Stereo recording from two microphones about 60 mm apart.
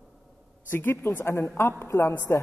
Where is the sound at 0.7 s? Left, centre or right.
Left.